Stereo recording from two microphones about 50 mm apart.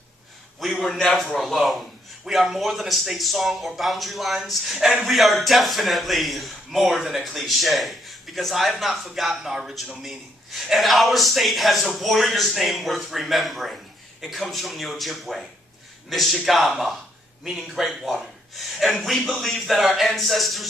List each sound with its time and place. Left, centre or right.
0.6 s a man's voice: centre